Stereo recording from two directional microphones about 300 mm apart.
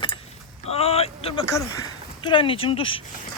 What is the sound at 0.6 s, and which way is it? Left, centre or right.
Speech, centre.